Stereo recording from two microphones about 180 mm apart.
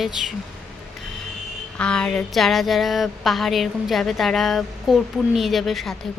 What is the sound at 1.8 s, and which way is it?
Speech, 5° left (ahead or behind).